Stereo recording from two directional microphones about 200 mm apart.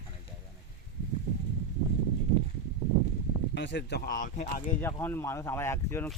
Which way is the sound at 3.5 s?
60° left (ahead or behind).